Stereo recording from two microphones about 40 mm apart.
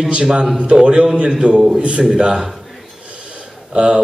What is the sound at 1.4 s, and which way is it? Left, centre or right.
Speech, right.